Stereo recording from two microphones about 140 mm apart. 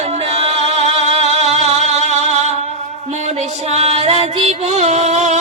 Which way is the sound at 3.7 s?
50° right (ahead or behind).